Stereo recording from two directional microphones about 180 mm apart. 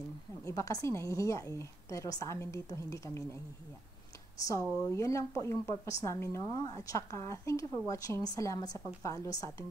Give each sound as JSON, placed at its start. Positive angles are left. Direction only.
{"t": 0.5, "sound": "speech", "side_deg": 20}
{"t": 4.5, "sound": "a woman's voice", "side_deg": 20}